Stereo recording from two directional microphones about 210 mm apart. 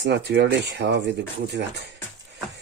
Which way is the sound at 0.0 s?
55° right (ahead or behind).